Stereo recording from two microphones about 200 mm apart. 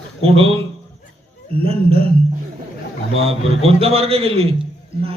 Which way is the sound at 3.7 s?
30° right (ahead or behind).